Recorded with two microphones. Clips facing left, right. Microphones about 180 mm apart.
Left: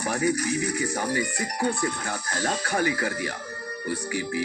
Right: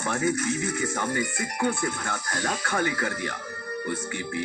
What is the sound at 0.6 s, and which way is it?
Speech, 35° left (ahead or behind).